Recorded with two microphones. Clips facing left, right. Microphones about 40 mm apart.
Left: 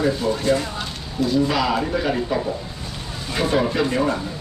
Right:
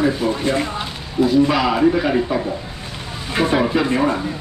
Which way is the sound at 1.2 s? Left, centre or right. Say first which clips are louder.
Right 4 dB; centre.